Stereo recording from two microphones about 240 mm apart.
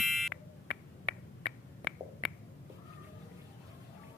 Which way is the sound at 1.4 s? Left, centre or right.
Centre.